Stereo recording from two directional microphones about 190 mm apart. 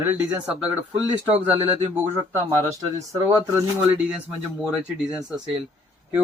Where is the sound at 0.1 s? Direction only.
10° right (ahead or behind).